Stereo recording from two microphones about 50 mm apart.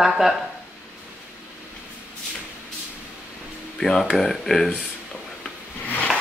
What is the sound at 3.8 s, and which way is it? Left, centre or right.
Speech, centre.